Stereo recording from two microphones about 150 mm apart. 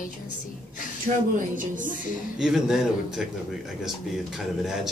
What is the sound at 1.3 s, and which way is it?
Speech, 60° right (ahead or behind).